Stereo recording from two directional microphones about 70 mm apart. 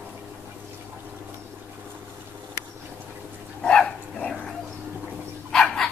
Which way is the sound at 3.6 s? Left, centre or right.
Centre.